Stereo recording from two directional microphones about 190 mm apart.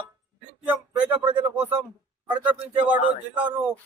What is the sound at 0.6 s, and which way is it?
Speech, 10° right (ahead or behind).